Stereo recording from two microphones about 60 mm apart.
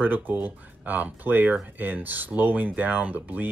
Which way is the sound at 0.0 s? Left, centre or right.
Right.